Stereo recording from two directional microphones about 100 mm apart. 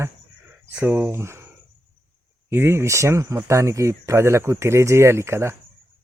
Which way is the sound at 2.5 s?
25° right (ahead or behind).